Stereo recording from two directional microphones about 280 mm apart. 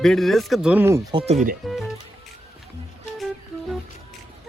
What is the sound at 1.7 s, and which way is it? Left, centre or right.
Speech, centre.